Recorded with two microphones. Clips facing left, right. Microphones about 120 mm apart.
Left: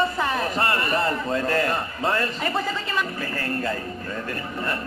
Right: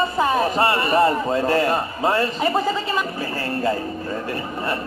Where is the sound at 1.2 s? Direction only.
30° right (ahead or behind).